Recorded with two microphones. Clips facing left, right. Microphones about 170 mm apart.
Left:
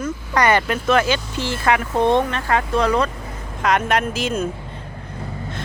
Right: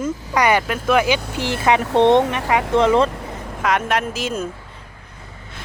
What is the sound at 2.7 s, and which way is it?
Speech, 25° right (ahead or behind).